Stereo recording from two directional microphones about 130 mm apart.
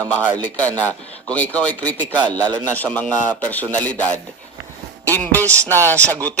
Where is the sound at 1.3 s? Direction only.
10° left (ahead or behind).